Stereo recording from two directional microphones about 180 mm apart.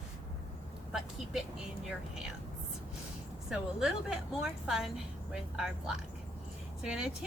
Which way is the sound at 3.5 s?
5° right (ahead or behind).